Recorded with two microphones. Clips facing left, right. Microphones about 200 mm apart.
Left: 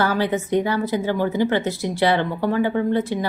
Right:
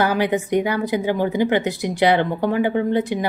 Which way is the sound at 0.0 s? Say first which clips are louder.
Right 2 dB; 15° right (ahead or behind).